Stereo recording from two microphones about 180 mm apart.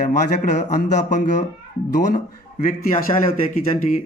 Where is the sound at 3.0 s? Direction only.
50° left (ahead or behind).